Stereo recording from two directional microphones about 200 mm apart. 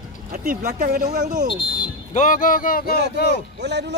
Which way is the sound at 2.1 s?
40° left (ahead or behind).